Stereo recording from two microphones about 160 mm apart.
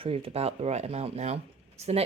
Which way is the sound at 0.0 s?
35° right (ahead or behind).